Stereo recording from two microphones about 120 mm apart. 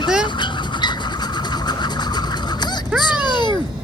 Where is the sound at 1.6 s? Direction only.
35° left (ahead or behind).